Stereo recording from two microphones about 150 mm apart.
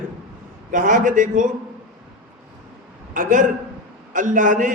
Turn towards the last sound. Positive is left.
turn(degrees=-60)  # may be behind; listen again after turning